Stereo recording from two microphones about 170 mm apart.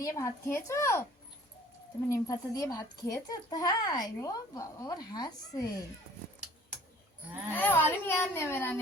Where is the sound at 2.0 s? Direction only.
20° left (ahead or behind).